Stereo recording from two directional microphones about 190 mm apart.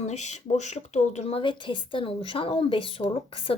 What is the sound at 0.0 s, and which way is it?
Speech, 35° left (ahead or behind).